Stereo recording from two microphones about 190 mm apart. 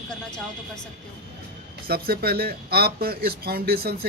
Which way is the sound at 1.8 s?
55° right (ahead or behind).